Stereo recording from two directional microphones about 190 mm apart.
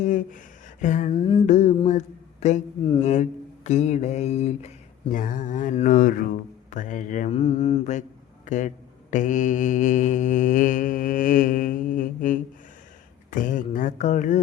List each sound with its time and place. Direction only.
0.0 s mantra: 45° left (ahead or behind)
0.8 s speech: 40° left (ahead or behind)
1.1 s a sound: 25° left (ahead or behind)
1.5 s a man's voice: 40° left (ahead or behind)
5.1 s mantra: 45° left (ahead or behind)